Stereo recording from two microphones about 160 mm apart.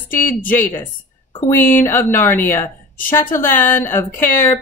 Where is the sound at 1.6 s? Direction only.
55° left (ahead or behind).